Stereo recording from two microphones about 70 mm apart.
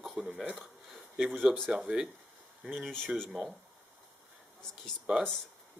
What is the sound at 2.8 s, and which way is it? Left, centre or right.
Speech, centre.